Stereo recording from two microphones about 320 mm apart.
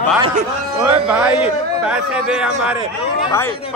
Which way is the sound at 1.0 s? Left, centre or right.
Centre.